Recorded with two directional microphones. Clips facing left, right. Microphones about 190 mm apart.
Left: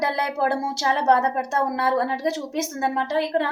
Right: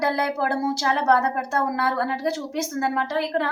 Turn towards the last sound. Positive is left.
turn(degrees=20)  # may be behind; listen again after turning